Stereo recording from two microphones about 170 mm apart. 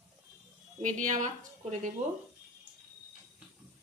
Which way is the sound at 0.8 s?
45° right (ahead or behind).